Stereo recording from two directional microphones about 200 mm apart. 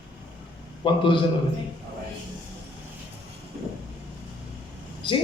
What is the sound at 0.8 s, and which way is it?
Speech, 25° left (ahead or behind).